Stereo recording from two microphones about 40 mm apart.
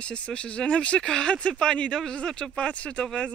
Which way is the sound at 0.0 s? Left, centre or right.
Left.